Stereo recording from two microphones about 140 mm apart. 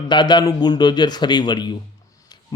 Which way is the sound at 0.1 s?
30° left (ahead or behind).